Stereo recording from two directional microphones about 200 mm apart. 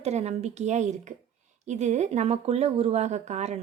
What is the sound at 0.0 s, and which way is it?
Speech, 35° right (ahead or behind).